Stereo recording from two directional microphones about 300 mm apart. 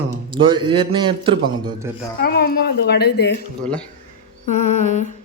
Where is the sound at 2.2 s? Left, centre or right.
Left.